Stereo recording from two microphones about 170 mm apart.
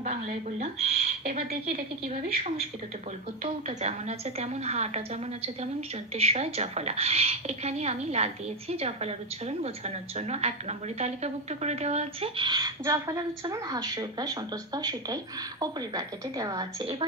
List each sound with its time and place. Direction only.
0.8 s speech: 70° right (ahead or behind)
1.7 s a woman's voice: 40° right (ahead or behind)
4.4 s a woman's voice: 40° right (ahead or behind); by 16.9 s 20° right (ahead or behind)